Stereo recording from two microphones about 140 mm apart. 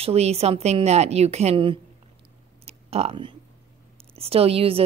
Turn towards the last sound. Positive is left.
turn(degrees=-45)  # may be behind; listen again after turning